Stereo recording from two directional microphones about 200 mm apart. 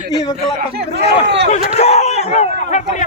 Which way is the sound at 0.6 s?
55° right (ahead or behind).